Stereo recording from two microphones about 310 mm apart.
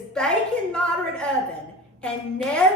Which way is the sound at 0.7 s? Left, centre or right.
Centre.